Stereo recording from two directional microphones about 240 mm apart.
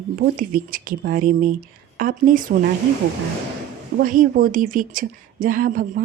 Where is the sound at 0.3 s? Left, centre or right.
Right.